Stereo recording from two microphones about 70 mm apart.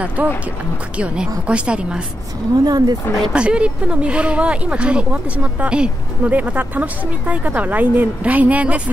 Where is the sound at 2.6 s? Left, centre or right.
Right.